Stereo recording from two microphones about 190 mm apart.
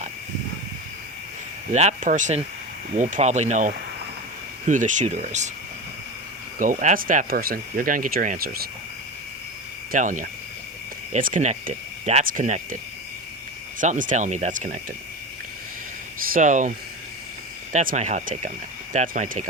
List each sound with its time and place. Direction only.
1.7 s speech: 40° right (ahead or behind)
6.6 s speech: 45° right (ahead or behind)
9.9 s speech: 45° right (ahead or behind)
16.3 s speech: 40° right (ahead or behind)